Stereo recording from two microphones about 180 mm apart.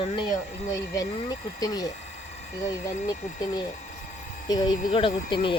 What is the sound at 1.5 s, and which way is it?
Speech, 20° left (ahead or behind).